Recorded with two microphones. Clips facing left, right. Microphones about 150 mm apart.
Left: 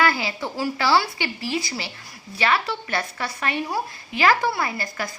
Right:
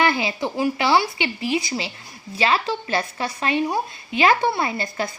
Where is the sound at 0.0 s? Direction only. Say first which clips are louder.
Right 2 dB; 20° right (ahead or behind).